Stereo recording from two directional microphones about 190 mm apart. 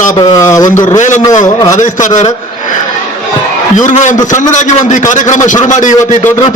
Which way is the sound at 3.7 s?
40° left (ahead or behind).